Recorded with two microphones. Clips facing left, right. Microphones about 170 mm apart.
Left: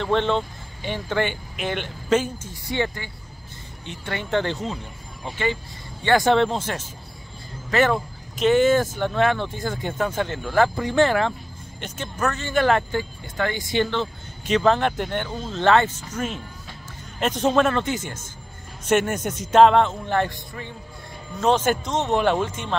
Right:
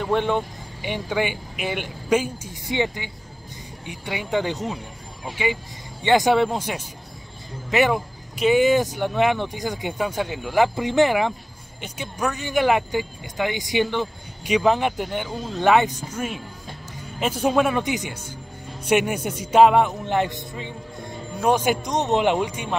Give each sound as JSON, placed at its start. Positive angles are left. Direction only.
{"t": 0.0, "sound": "speech", "side_deg": -10}